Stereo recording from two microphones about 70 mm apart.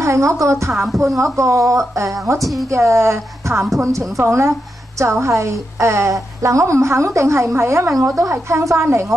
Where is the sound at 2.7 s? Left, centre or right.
Right.